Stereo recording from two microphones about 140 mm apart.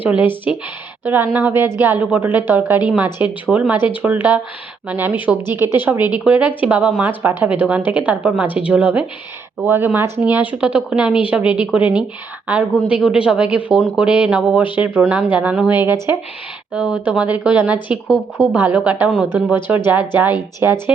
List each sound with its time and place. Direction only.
1.0 s a woman's voice: 15° right (ahead or behind)